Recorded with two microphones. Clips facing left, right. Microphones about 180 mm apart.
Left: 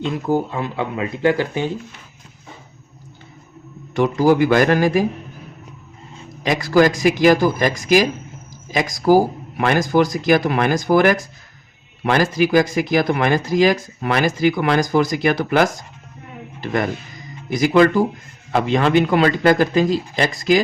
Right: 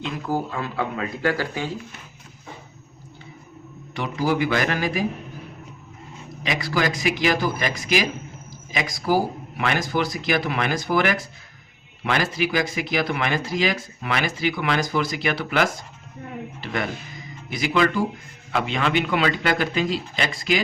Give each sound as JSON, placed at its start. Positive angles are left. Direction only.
{"t": 0.0, "sound": "speech", "side_deg": 20}
{"t": 3.9, "sound": "speech", "side_deg": 45}
{"t": 6.4, "sound": "a man's voice", "side_deg": 45}